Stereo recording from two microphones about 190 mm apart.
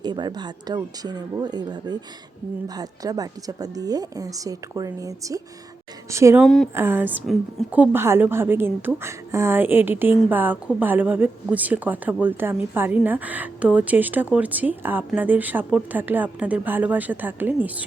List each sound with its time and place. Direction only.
0.0 s a woman's voice: 20° right (ahead or behind)
6.4 s speech: centre (ahead or behind)
6.7 s a woman's voice: 10° right (ahead or behind)